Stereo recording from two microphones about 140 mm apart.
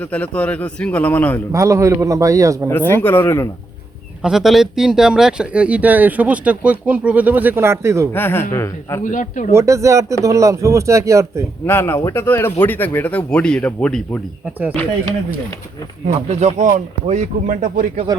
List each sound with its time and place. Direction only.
0.0 s speech: 10° left (ahead or behind)
1.5 s speech: 20° right (ahead or behind)
2.6 s speech: 15° left (ahead or behind)
4.2 s speech: 5° right (ahead or behind); by 8.0 s 20° right (ahead or behind)
8.1 s speech: 15° left (ahead or behind)
9.0 s speech: 65° left (ahead or behind)
9.5 s speech: 20° right (ahead or behind)
11.6 s speech: 15° left (ahead or behind)
16.3 s speech: 55° right (ahead or behind); by 17.8 s 75° right (ahead or behind)